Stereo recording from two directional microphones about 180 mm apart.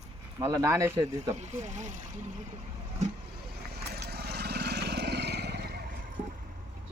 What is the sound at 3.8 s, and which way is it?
Vehicle, 60° right (ahead or behind).